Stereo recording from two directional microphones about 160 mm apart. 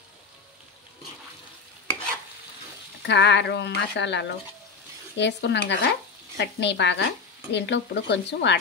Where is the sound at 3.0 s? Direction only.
90° left.